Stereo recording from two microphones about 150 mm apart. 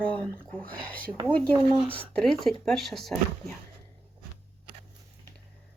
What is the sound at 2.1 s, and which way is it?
Speech, 5° left (ahead or behind).